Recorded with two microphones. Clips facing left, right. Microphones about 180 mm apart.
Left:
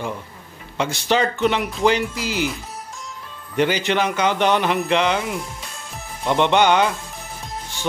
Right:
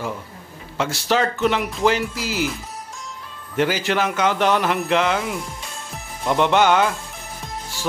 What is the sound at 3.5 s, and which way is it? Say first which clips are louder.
Speech: left 1 dB; centre (ahead or behind).